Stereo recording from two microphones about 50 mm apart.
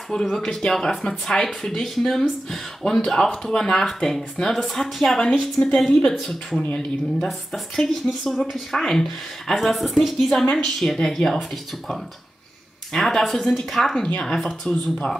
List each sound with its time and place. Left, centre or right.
0.1 s speech: centre
6.7 s speech: centre
7.2 s speech: centre
12.9 s speech: centre